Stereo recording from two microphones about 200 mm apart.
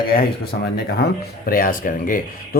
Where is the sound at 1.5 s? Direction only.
45° left (ahead or behind).